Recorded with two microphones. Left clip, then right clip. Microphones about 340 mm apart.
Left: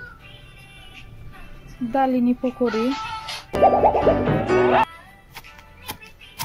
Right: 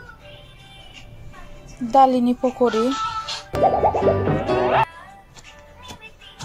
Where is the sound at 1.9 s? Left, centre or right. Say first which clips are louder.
Right 6 dB; right.